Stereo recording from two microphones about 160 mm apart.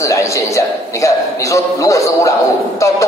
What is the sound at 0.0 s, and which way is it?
A man's voice, 20° left (ahead or behind).